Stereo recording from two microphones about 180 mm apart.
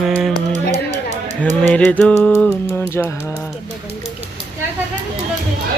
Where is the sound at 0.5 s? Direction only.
40° right (ahead or behind).